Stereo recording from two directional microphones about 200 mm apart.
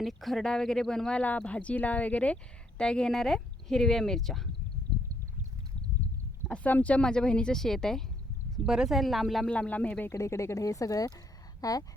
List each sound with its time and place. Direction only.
0.0 s speech: centre (ahead or behind)
6.5 s speech: 5° left (ahead or behind)